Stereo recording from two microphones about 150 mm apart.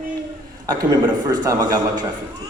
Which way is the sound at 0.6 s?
25° right (ahead or behind).